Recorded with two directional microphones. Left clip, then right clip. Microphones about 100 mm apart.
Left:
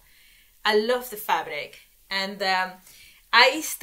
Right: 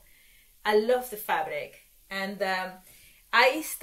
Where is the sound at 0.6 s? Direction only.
40° left (ahead or behind).